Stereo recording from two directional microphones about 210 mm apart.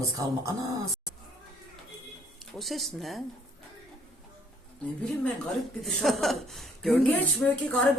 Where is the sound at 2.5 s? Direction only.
Centre (ahead or behind).